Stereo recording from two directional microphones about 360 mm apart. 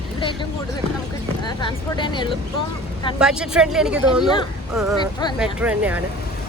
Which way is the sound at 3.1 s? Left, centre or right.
Centre.